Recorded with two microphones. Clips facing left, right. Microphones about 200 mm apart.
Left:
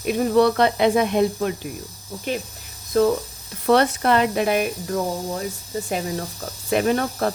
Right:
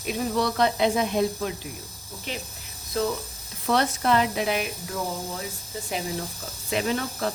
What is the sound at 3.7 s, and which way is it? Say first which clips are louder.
Speech: left 5 dB; 60° left (ahead or behind).